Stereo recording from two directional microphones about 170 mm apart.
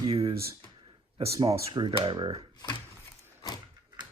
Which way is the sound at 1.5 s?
30° right (ahead or behind).